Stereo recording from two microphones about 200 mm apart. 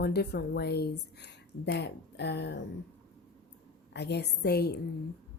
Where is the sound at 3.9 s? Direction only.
55° left (ahead or behind).